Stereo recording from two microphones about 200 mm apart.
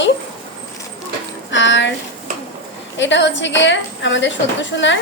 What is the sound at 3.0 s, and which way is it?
A woman's voice, 65° left (ahead or behind).